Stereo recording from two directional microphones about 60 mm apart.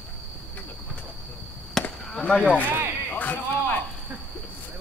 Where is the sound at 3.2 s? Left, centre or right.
Left.